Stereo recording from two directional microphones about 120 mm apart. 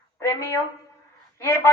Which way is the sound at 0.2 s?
25° left (ahead or behind).